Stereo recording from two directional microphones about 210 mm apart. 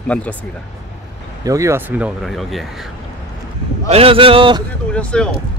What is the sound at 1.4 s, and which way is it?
Speech, 15° right (ahead or behind).